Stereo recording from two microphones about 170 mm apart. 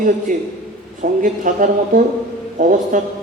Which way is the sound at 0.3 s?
50° right (ahead or behind).